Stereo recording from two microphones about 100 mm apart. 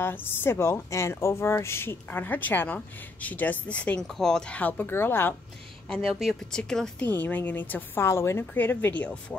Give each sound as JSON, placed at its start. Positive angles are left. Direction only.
{"t": 0.0, "sound": "a woman's voice", "side_deg": 20}
{"t": 5.9, "sound": "a woman's voice", "side_deg": 0}
{"t": 7.1, "sound": "a woman's voice", "side_deg": 15}